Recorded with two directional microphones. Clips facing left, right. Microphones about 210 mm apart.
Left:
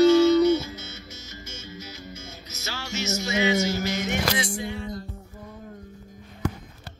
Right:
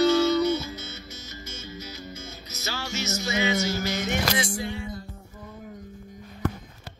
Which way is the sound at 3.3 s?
25° left (ahead or behind).